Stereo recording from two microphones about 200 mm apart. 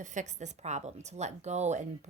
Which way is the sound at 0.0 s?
40° right (ahead or behind).